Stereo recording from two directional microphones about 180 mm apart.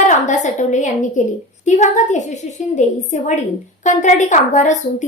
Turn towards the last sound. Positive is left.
turn(degrees=40)  # may be behind; listen again after turning